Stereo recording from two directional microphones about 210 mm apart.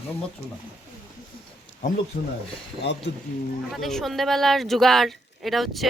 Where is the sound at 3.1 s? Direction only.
55° left (ahead or behind).